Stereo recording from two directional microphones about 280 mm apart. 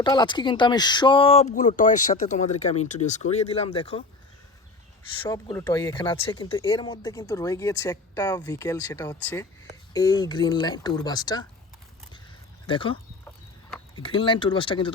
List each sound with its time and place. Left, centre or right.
0.0 s speech: centre
5.2 s speech: centre
12.6 s speech: centre
13.2 s a sound: centre
14.0 s speech: centre